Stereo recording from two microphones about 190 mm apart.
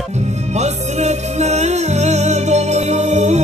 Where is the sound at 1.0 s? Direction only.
35° right (ahead or behind).